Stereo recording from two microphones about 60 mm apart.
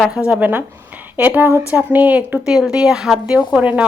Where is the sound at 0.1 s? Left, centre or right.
Centre.